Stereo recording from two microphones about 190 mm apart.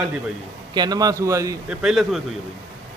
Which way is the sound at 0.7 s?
20° right (ahead or behind).